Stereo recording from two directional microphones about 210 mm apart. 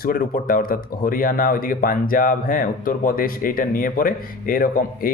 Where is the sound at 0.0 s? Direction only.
45° left (ahead or behind).